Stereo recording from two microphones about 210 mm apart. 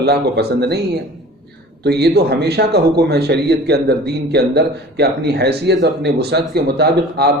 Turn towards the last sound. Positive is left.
turn(degrees=-50)  # may be behind; listen again after turning